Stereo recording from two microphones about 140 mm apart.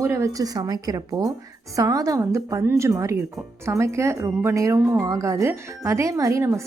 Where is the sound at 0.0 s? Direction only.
20° right (ahead or behind).